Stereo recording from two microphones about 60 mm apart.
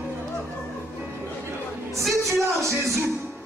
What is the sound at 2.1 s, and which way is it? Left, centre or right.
Speech, right.